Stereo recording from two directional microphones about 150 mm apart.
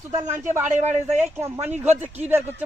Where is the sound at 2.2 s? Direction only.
15° right (ahead or behind).